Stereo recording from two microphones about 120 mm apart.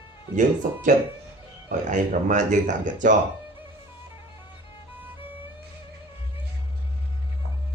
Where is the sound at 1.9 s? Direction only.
90° right.